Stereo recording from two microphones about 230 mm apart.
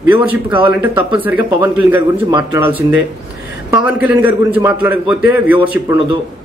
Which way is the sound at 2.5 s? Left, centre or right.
Right.